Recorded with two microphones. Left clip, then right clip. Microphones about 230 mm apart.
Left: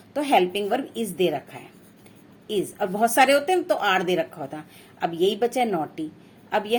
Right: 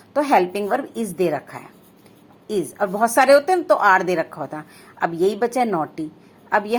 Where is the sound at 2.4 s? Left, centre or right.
Right.